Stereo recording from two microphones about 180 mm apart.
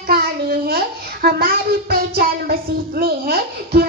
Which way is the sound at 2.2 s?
55° right (ahead or behind).